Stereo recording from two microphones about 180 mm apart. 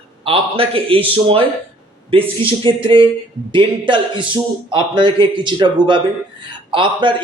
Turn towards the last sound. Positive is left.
turn(degrees=-25)  # may be behind; listen again after turning